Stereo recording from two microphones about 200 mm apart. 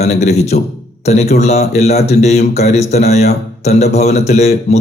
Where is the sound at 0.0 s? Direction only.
35° left (ahead or behind).